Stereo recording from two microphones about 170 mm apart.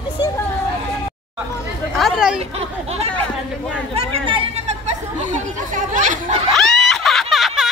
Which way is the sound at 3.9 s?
35° right (ahead or behind).